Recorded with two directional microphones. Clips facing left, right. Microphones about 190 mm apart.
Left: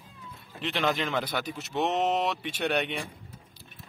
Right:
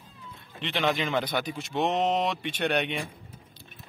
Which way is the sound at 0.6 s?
Centre (ahead or behind).